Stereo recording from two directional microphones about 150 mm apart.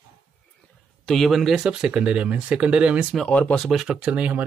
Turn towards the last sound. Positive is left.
turn(degrees=-10)  # may be behind; listen again after turning